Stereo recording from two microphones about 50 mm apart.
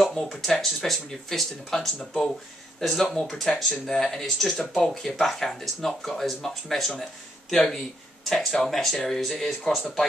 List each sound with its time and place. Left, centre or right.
0.0 s speech: centre
2.0 s speech: centre
2.8 s speech: centre